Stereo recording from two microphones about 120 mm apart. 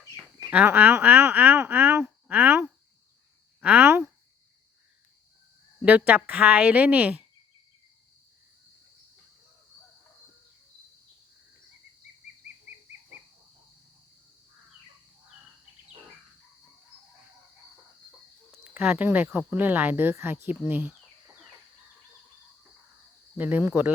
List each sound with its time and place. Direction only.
0.5 s speech: 15° right (ahead or behind)
5.8 s speech: 15° right (ahead or behind)
18.6 s speech: 10° right (ahead or behind)
23.4 s speech: 15° right (ahead or behind)